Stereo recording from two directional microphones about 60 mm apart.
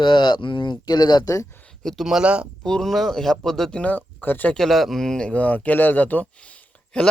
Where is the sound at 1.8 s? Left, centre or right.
Centre.